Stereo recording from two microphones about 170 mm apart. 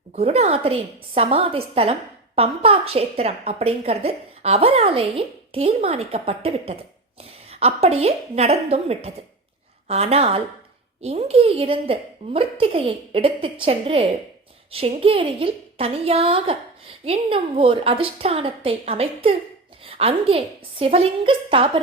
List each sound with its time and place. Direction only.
0.1 s a woman's voice: 40° right (ahead or behind)